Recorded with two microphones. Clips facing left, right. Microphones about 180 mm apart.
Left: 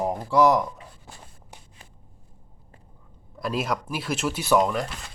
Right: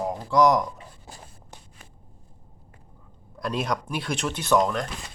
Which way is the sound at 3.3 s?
5° left (ahead or behind).